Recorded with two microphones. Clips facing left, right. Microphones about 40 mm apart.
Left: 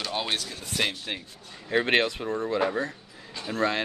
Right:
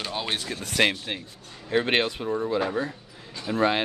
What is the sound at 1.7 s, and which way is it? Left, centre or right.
Speech, centre.